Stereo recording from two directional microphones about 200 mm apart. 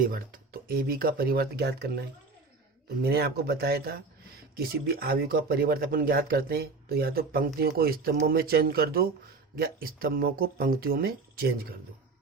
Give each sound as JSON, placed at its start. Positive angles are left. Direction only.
{"t": 0.0, "sound": "speech", "side_deg": -45}